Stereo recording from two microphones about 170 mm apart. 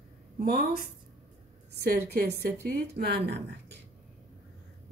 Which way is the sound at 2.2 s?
80° right.